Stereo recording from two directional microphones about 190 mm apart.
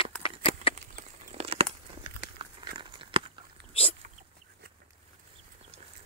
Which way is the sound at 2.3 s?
25° right (ahead or behind).